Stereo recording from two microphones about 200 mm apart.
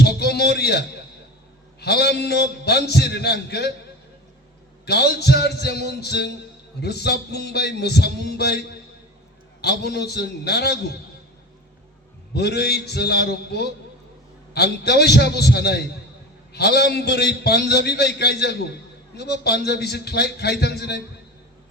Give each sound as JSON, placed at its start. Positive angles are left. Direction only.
{"t": 0.0, "sound": "a sound", "side_deg": 55}
{"t": 1.8, "sound": "a man's voice", "side_deg": 55}
{"t": 4.9, "sound": "a man's voice", "side_deg": 55}
{"t": 12.3, "sound": "a man's voice", "side_deg": 55}